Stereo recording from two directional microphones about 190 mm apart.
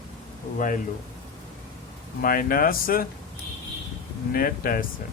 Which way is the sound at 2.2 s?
50° left (ahead or behind).